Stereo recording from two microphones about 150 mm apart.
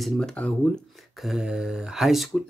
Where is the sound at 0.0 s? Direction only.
5° left (ahead or behind).